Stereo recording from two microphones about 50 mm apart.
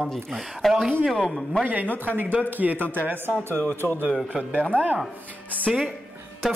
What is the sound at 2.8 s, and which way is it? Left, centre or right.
Speech, left.